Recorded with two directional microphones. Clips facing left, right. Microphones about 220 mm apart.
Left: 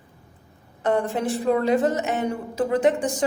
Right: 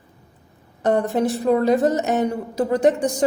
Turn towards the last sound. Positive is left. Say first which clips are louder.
# right 2 dB
turn(degrees=-40)  # may be behind; listen again after turning